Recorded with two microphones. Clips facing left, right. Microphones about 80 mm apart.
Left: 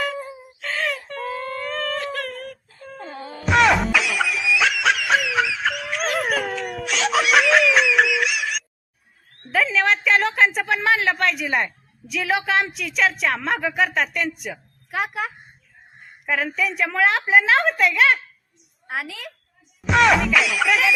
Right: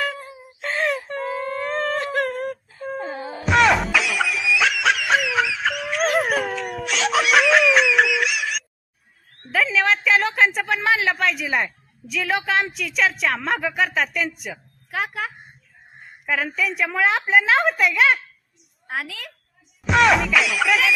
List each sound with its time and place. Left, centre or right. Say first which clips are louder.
0.6 s a sound: right 3 dB; right
1.1 s baby cry: right 2 dB; centre
1.6 s a sound: right 3 dB; right
3.0 s music: even; centre
3.4 s music: even; centre
6.2 s laughter: right 1 dB; centre
9.5 s a woman's voice: even; centre
19.8 s music: even; centre